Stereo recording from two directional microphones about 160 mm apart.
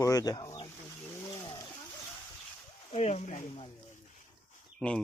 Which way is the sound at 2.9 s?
45° left (ahead or behind).